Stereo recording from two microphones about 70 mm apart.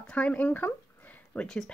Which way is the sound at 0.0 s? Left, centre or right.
Centre.